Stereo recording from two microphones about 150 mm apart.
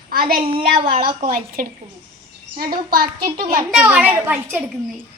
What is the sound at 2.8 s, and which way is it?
Speech, 80° right.